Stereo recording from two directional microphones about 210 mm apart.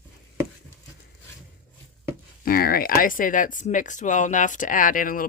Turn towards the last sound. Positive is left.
turn(degrees=40)  # may be behind; listen again after turning